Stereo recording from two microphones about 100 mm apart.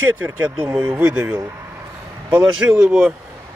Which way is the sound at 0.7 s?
10° right (ahead or behind).